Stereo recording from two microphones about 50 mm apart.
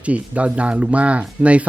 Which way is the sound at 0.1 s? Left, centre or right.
Right.